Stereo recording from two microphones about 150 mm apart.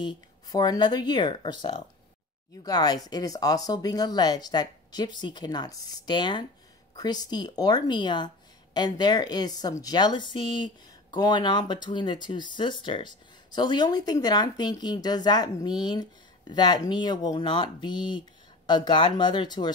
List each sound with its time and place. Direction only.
0.0 s speech: 30° left (ahead or behind)